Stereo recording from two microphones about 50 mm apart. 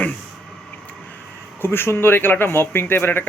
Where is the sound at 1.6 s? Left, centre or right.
Left.